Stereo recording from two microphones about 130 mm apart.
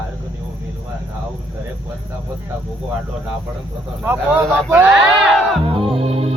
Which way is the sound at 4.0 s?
15° right (ahead or behind).